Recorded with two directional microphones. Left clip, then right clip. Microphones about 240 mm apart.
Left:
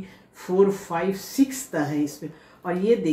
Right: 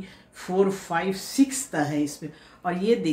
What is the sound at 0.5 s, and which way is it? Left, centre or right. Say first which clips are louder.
Speech: left 2 dB; right.